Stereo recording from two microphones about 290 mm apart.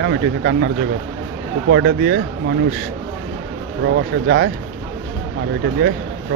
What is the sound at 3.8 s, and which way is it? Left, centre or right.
Speech, right.